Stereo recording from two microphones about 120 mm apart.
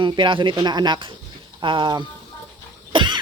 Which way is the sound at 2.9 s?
40° right (ahead or behind).